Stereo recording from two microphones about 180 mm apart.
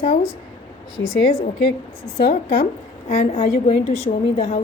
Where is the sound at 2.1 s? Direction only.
55° left (ahead or behind).